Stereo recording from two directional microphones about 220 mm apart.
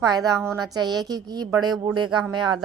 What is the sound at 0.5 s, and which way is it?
Speech, 20° right (ahead or behind).